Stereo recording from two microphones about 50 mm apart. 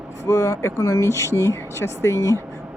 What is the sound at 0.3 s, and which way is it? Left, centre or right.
Speech, left.